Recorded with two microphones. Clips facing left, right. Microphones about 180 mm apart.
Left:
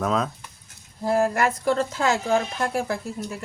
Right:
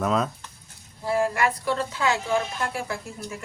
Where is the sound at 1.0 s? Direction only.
45° left (ahead or behind).